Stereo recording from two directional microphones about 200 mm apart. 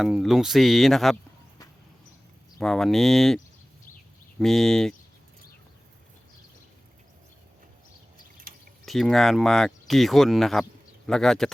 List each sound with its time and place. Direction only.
0.0 s speech: centre (ahead or behind)
2.6 s speech: centre (ahead or behind)
8.5 s drip: 45° right (ahead or behind)
8.9 s speech: centre (ahead or behind)